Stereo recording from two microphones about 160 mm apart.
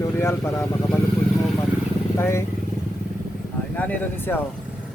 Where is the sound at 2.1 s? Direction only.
15° left (ahead or behind).